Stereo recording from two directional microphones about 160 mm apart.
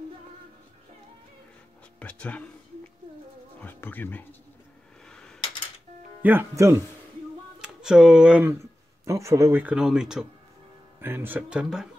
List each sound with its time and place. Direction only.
2.0 s speech: 10° left (ahead or behind)
3.6 s speech: 10° left (ahead or behind)
5.0 s a sound: 5° left (ahead or behind)
6.2 s speech: 15° right (ahead or behind)
7.6 s speech: 5° right (ahead or behind)